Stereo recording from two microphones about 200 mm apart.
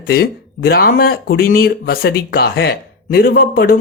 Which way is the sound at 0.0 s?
50° left (ahead or behind).